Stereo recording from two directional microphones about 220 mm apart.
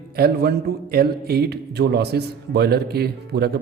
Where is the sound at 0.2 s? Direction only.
45° right (ahead or behind).